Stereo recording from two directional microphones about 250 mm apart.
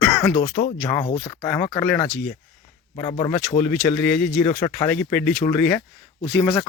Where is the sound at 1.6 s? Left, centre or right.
Centre.